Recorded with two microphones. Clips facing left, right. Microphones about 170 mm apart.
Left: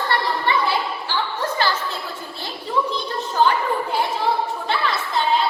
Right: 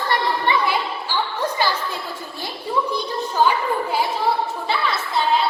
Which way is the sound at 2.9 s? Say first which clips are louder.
Right 1 dB; 10° right (ahead or behind).